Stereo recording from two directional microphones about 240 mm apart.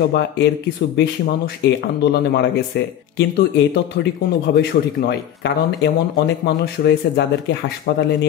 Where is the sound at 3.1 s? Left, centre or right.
Left.